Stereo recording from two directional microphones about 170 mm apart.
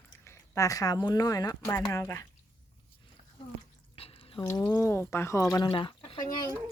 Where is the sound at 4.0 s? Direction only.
35° left (ahead or behind).